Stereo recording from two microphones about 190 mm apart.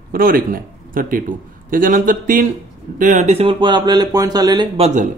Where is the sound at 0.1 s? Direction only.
50° right (ahead or behind); by 4.8 s 20° right (ahead or behind).